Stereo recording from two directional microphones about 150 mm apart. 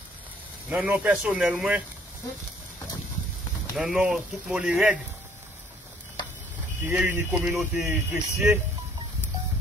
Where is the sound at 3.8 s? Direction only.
5° right (ahead or behind).